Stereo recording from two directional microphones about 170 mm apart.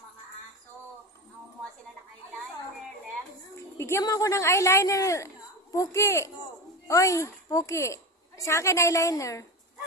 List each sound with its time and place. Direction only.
3.5 s a woman's voice: 15° left (ahead or behind)